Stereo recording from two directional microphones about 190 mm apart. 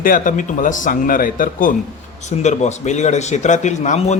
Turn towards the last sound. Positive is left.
turn(degrees=40)  # may be behind; listen again after turning